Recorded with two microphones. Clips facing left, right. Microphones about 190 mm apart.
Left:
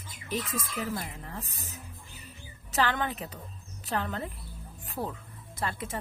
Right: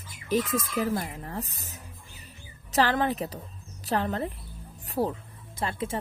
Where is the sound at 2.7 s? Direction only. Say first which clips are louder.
Right 5 dB; 35° right (ahead or behind).